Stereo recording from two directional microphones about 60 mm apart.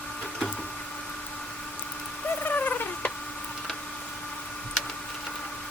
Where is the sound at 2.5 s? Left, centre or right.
Left.